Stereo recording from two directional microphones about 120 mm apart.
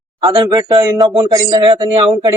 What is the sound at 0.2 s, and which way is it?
A man's voice, 35° right (ahead or behind).